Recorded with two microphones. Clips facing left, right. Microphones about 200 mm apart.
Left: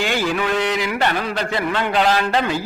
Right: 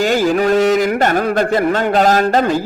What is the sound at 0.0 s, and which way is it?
A man's voice, 40° right (ahead or behind).